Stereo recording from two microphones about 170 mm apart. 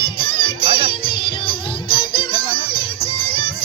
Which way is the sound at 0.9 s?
30° left (ahead or behind).